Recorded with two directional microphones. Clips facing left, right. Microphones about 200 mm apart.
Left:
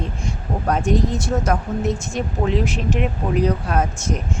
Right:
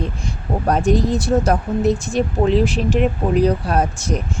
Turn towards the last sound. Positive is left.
turn(degrees=-35)  # may be behind; listen again after turning